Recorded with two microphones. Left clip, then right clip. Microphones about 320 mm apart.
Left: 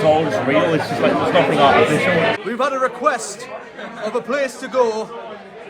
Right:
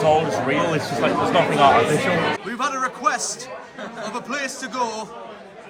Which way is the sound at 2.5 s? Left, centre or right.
Centre.